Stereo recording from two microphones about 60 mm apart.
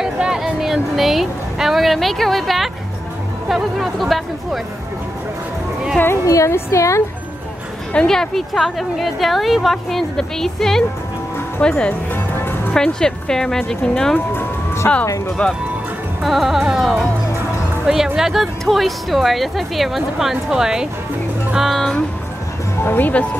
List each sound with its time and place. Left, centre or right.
0.0 s music: centre
3.4 s a woman's voice: centre
6.2 s a woman's voice: left
6.5 s speech: left
7.9 s a woman's voice: centre
11.6 s speech: centre
12.1 s music: left
12.7 s speech: centre
14.1 s music: left
15.0 s a woman's voice: left
16.2 s a woman's voice: centre
21.5 s a woman's voice: centre
22.8 s speech: left